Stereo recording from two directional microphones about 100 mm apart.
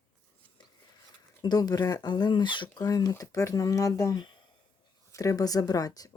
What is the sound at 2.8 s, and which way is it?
Speech, 40° left (ahead or behind).